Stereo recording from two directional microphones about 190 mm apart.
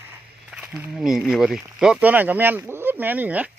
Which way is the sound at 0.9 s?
Centre (ahead or behind).